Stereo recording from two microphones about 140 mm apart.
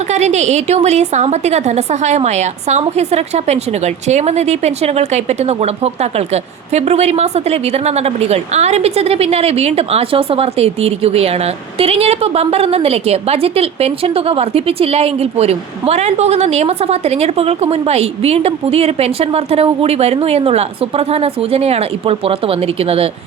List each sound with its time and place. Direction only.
0.1 s a woman's voice: 55° right (ahead or behind)